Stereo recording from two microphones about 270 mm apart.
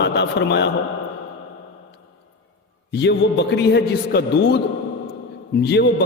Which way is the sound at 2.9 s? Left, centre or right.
Left.